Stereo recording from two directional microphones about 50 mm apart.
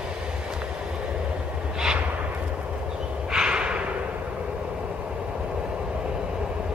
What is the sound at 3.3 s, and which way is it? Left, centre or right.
Snort, centre.